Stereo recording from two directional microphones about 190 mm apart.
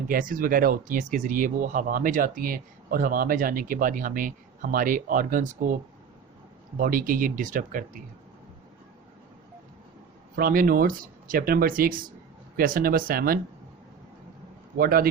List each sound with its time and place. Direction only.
0.1 s speech: 45° right (ahead or behind)
6.7 s speech: 50° right (ahead or behind)
10.3 s speech: 50° right (ahead or behind)
14.8 s speech: 50° right (ahead or behind)